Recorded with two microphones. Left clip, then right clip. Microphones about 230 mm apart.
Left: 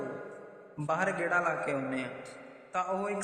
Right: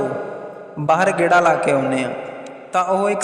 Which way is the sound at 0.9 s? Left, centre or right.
Right.